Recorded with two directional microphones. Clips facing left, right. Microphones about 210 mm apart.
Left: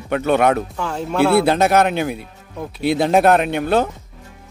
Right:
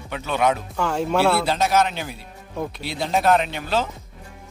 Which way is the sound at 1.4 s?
60° left (ahead or behind).